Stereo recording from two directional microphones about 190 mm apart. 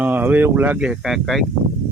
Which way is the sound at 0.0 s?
10° right (ahead or behind).